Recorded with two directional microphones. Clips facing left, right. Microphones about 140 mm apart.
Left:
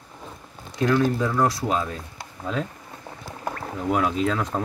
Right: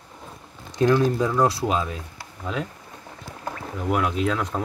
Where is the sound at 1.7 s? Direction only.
15° right (ahead or behind).